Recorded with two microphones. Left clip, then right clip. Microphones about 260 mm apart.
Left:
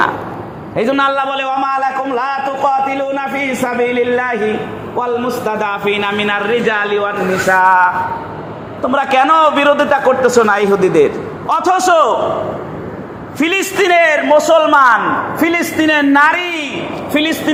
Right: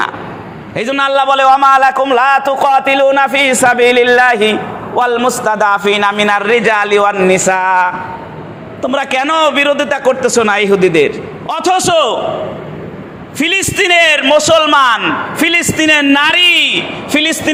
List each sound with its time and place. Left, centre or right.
0.8 s a man's voice: right
13.4 s a man's voice: right
16.1 s a man's voice: right
16.5 s a woman's voice: centre
17.2 s a man's voice: right